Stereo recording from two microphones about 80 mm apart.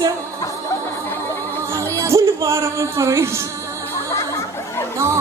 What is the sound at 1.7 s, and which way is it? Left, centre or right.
Music, right.